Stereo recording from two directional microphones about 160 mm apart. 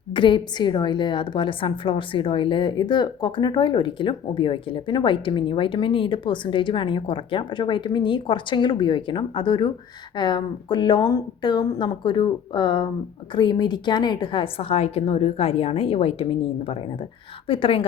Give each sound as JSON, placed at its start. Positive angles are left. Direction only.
{"t": 0.1, "sound": "a woman's voice", "side_deg": 30}